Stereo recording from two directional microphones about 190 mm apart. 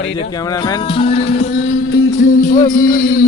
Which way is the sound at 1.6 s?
85° left.